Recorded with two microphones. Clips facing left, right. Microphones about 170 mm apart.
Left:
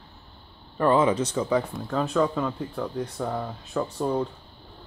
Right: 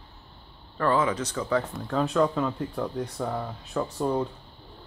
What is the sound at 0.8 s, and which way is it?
Speech, 20° left (ahead or behind).